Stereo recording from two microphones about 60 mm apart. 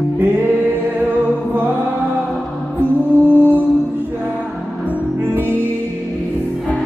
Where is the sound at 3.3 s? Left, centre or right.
Right.